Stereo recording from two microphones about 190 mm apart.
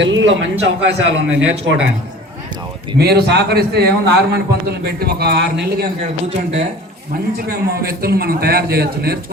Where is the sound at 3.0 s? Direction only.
60° right (ahead or behind).